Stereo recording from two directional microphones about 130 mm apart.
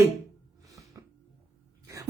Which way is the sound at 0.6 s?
25° right (ahead or behind).